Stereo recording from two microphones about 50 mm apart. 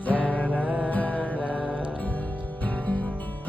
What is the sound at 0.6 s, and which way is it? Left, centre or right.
Music, right.